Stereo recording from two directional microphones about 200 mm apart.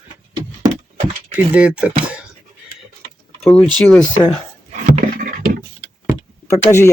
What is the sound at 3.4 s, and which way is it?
Speech, 5° left (ahead or behind).